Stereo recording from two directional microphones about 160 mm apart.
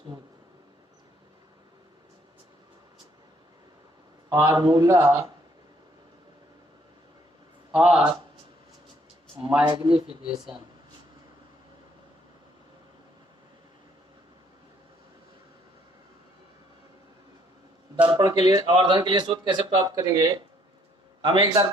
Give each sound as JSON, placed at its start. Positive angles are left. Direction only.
{"t": 4.3, "sound": "a man's voice", "side_deg": -20}
{"t": 7.7, "sound": "speech", "side_deg": -10}
{"t": 9.6, "sound": "a man's voice", "side_deg": -30}
{"t": 17.9, "sound": "a man's voice", "side_deg": -30}